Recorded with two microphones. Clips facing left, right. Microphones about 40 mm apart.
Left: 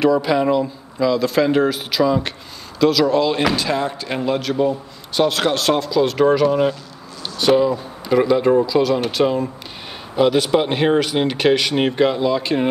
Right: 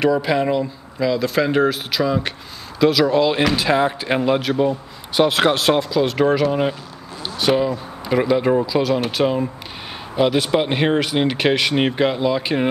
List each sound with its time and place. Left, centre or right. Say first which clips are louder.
0.0 s a man's voice: left 2 dB; centre